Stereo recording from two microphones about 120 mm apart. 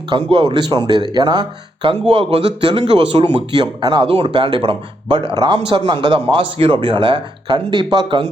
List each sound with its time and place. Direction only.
0.1 s speech: 45° right (ahead or behind)
4.1 s speech: 50° right (ahead or behind)